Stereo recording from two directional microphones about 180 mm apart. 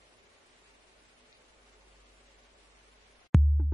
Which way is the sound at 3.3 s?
Centre (ahead or behind).